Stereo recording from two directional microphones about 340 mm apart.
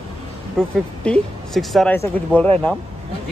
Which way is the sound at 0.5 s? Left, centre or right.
Centre.